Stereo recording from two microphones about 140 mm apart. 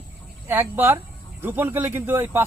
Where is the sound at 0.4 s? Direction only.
15° right (ahead or behind).